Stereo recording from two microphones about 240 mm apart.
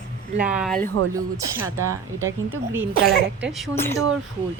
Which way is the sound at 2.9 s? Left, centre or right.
Right.